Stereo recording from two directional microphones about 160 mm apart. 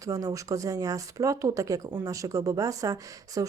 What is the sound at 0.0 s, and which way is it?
Speech, 20° right (ahead or behind).